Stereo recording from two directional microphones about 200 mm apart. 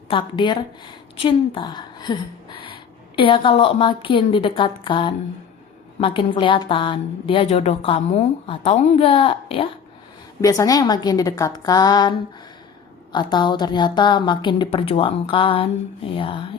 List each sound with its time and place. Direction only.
0.1 s a woman's voice: 25° left (ahead or behind)
13.1 s a woman's voice: 20° left (ahead or behind)